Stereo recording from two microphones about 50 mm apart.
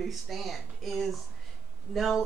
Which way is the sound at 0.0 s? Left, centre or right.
Centre.